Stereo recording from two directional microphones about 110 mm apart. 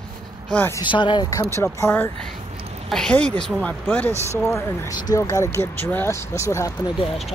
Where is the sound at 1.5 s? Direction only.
25° left (ahead or behind).